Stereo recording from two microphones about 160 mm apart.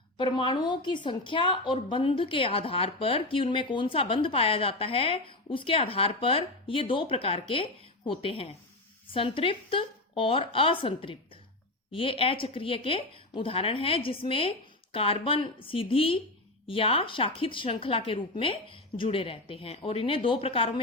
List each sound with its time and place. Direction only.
0.2 s a woman's voice: 30° left (ahead or behind)